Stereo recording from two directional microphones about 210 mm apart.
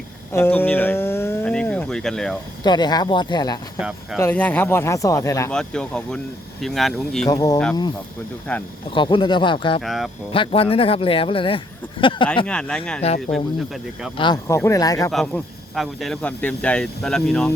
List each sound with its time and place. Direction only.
0.3 s a sound: 10° left (ahead or behind)
2.6 s speech: 20° left (ahead or behind)
3.8 s speech: 5° right (ahead or behind)
4.2 s speech: 10° left (ahead or behind)
5.5 s speech: 5° left (ahead or behind)
7.3 s speech: 20° left (ahead or behind)
8.5 s speech: 5° left (ahead or behind)
8.9 s speech: 25° left (ahead or behind)
9.8 s speech: centre (ahead or behind)
10.3 s speech: 25° left (ahead or behind)
12.5 s speech: 5° left (ahead or behind)
14.2 s speech: 20° left (ahead or behind)
15.1 s speech: centre (ahead or behind)